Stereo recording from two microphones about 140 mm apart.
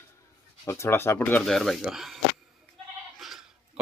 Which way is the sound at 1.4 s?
5° left (ahead or behind).